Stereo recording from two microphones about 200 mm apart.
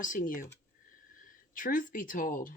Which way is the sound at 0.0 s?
40° left (ahead or behind).